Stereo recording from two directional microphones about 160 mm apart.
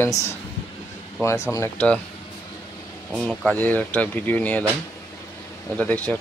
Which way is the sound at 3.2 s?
5° left (ahead or behind).